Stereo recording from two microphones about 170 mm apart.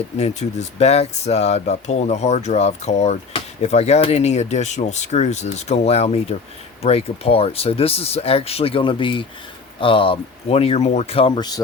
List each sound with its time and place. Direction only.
0.2 s speech: 40° left (ahead or behind); by 11.6 s 25° left (ahead or behind)